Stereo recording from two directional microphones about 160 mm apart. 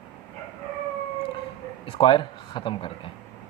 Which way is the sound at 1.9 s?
30° left (ahead or behind).